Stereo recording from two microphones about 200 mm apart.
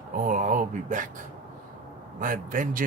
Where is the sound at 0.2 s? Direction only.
40° right (ahead or behind).